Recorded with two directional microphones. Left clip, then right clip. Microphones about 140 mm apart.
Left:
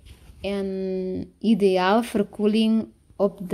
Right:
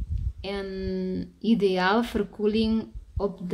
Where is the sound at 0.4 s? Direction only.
40° left (ahead or behind).